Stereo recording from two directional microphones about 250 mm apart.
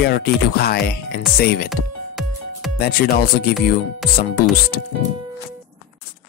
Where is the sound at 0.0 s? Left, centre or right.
Left.